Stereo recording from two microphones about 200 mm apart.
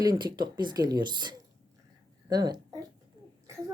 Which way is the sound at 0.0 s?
20° right (ahead or behind).